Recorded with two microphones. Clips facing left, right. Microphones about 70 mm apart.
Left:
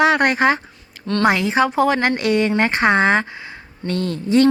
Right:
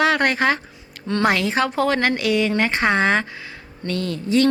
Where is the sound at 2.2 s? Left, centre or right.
Left.